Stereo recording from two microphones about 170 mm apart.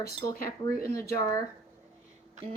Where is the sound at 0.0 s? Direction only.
60° left (ahead or behind).